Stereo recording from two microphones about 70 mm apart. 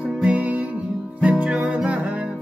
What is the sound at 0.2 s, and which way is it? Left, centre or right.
Music, right.